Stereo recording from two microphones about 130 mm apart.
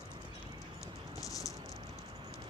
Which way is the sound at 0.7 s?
25° left (ahead or behind).